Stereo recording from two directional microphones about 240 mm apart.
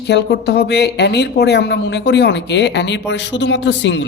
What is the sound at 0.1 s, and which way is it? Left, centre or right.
Speech, left.